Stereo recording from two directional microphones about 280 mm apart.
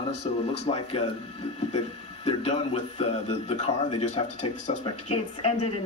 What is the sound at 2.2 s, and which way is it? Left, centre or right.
Speech, left.